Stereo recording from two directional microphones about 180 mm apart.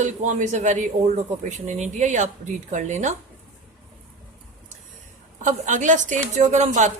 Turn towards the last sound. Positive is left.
turn(degrees=-40)  # may be behind; listen again after turning